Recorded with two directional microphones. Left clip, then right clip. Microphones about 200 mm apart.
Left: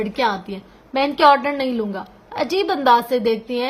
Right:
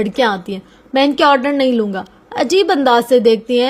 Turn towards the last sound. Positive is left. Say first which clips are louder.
# right 8 dB
turn(degrees=-35)  # may be behind; listen again after turning